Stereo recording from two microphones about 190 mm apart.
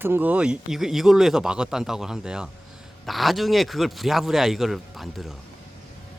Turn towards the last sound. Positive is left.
turn(degrees=0)  # may be behind; listen again after turning